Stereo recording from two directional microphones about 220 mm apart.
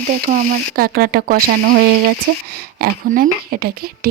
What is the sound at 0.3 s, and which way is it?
Speech, 40° right (ahead or behind).